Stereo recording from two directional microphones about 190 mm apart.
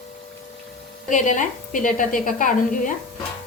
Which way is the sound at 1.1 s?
40° left (ahead or behind).